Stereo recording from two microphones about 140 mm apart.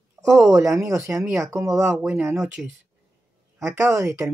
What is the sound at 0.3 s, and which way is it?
Speech, 20° right (ahead or behind).